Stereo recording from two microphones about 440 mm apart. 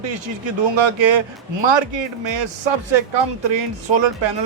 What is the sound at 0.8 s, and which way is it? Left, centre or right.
A man's voice, right.